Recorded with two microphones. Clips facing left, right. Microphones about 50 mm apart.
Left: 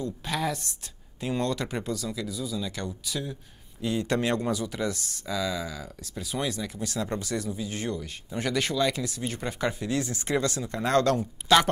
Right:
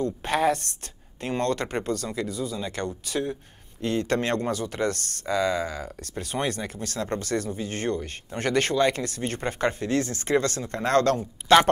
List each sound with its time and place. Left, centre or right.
0.0 s speech: right